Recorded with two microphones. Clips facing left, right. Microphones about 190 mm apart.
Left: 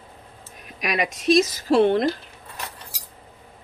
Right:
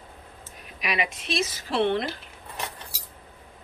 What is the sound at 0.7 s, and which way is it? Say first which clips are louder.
Speech: left 4 dB; 45° left (ahead or behind).